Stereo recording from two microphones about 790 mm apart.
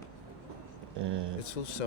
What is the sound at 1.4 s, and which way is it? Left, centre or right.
Speech, left.